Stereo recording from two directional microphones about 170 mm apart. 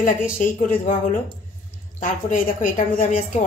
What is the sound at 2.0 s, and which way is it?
A man's voice, 50° left (ahead or behind).